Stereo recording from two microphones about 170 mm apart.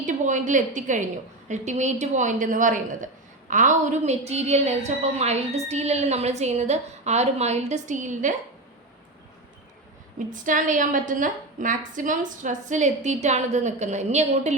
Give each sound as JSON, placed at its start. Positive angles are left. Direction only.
{"t": 0.0, "sound": "a woman's voice", "side_deg": -45}
{"t": 10.2, "sound": "a woman's voice", "side_deg": -50}